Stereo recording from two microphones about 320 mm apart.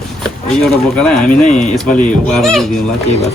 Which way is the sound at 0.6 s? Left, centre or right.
Centre.